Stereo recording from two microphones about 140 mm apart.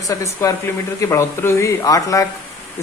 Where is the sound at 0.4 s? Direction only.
20° left (ahead or behind).